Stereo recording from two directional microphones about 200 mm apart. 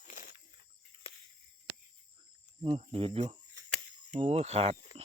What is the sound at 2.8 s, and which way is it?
Speech, 30° right (ahead or behind).